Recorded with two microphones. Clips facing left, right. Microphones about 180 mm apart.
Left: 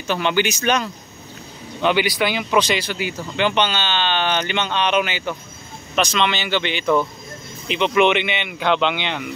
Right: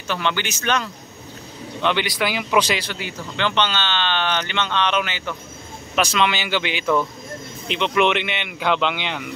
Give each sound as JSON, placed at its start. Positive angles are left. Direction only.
{"t": 0.0, "sound": "speech", "side_deg": 15}
{"t": 5.9, "sound": "speech", "side_deg": -5}